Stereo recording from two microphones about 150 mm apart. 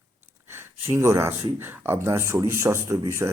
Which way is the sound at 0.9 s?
20° right (ahead or behind).